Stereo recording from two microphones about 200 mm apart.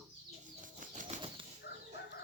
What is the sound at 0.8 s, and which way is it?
Bird flight, 40° right (ahead or behind).